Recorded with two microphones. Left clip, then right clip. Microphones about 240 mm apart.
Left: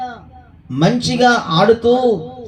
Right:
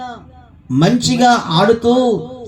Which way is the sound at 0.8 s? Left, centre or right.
Right.